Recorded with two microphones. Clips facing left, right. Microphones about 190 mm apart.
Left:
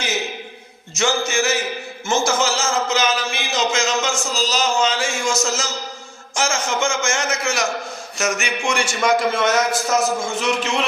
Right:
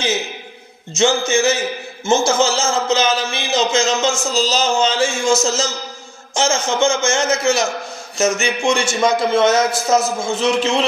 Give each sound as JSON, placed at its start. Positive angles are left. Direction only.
{"t": 0.9, "sound": "a man's voice", "side_deg": -25}